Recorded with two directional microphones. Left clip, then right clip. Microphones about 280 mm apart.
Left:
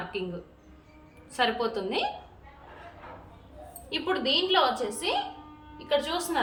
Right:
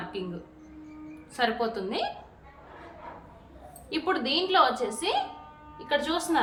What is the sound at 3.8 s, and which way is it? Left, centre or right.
Speech, centre.